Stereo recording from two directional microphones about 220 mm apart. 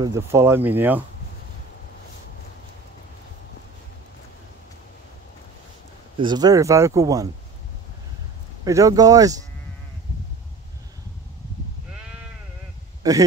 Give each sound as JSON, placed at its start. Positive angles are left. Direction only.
{"t": 0.0, "sound": "speech", "side_deg": -15}
{"t": 6.1, "sound": "speech", "side_deg": -20}
{"t": 8.6, "sound": "speech", "side_deg": -15}
{"t": 13.0, "sound": "speech", "side_deg": -15}